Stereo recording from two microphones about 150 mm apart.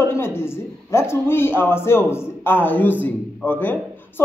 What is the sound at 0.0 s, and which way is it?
A man's voice, 15° left (ahead or behind).